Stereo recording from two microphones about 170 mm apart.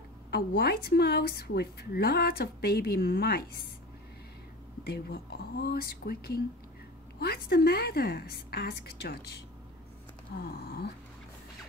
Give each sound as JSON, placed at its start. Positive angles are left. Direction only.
{"t": 0.3, "sound": "speech", "side_deg": 70}
{"t": 4.8, "sound": "speech", "side_deg": 70}
{"t": 10.3, "sound": "a sound", "side_deg": 65}